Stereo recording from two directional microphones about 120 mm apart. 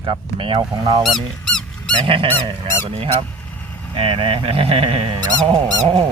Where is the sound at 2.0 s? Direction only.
45° right (ahead or behind).